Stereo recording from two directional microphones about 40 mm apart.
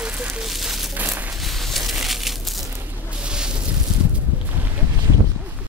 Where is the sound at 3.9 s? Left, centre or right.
Right.